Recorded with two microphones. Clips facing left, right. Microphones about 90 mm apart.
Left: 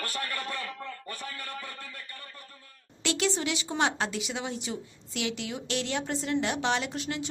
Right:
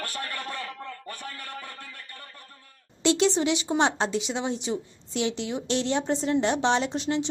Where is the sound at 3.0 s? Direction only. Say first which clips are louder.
Right 7 dB; 25° right (ahead or behind).